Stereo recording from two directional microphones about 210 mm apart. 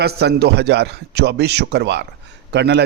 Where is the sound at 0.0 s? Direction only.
50° right (ahead or behind).